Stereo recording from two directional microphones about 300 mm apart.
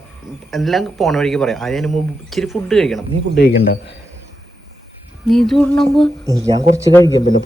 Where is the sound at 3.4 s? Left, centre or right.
Left.